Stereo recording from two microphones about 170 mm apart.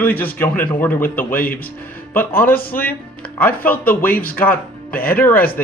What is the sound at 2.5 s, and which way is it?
Speech, 60° left (ahead or behind).